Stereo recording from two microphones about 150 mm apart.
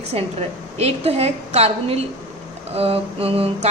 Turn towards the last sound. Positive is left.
turn(degrees=-40)  # may be behind; listen again after turning